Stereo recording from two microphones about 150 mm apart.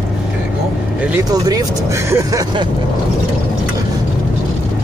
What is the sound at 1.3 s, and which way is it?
Speech, 25° right (ahead or behind).